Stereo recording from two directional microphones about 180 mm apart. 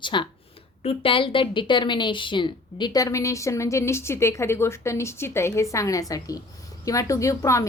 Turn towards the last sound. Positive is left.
turn(degrees=15)  # may be behind; listen again after turning